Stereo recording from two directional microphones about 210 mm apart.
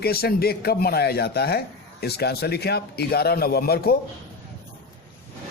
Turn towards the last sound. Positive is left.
turn(degrees=45)  # may be behind; listen again after turning